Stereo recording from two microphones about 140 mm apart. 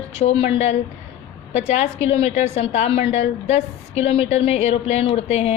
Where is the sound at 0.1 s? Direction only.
50° left (ahead or behind).